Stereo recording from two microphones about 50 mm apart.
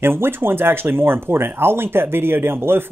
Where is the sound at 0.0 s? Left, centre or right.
Right.